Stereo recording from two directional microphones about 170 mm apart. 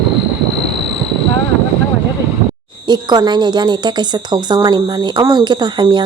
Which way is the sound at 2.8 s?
25° right (ahead or behind).